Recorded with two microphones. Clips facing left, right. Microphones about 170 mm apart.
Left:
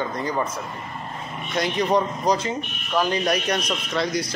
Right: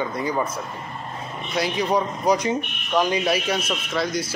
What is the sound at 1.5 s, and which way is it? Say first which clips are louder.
Speech: left 1 dB; 5° right (ahead or behind).